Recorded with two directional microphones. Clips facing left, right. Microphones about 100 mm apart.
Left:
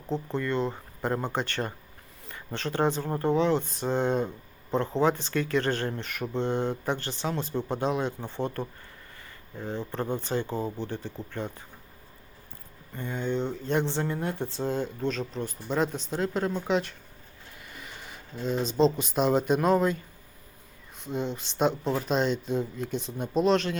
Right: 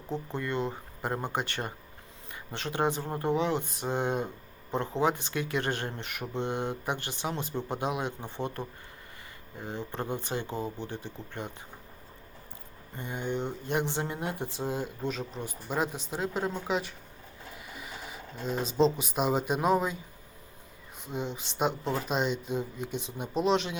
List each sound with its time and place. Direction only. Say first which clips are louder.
0.3 s speech: left 3 dB; 15° right (ahead or behind)
13.0 s speech: left 3 dB; 15° right (ahead or behind)
21.1 s speech: left 4 dB; 10° right (ahead or behind)